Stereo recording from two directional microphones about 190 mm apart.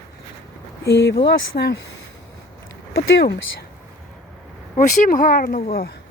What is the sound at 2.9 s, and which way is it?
Speech, 60° left (ahead or behind).